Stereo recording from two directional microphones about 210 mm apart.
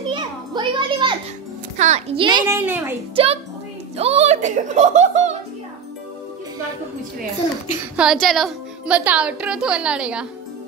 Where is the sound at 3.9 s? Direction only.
30° right (ahead or behind).